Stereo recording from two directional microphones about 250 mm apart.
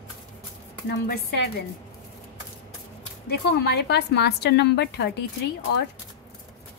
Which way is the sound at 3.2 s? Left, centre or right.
Left.